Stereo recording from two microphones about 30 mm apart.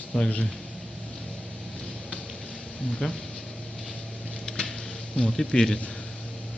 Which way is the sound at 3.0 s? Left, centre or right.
Left.